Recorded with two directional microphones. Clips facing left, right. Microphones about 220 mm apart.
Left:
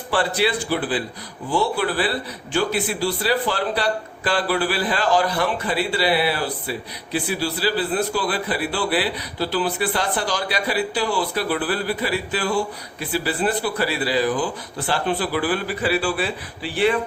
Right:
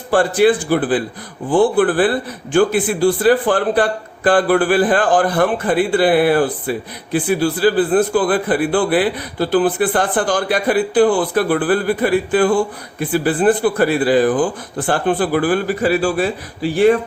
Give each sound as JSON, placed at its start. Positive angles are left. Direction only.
{"t": 0.1, "sound": "a man's voice", "side_deg": -45}